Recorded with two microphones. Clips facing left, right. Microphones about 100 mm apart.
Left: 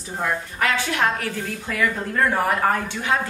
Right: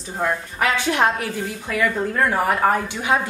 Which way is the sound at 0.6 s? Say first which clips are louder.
Right 3 dB; 20° right (ahead or behind).